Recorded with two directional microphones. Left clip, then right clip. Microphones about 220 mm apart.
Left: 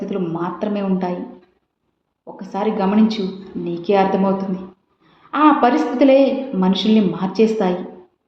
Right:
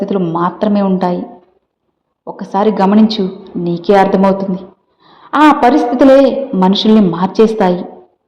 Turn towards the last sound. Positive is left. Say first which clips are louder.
# right 7 dB
turn(degrees=-35)  # may be behind; listen again after turning